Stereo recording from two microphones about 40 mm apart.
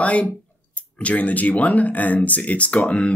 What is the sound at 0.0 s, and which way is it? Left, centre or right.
Speech, left.